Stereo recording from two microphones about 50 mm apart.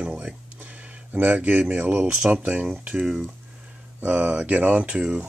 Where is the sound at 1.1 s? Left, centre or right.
Right.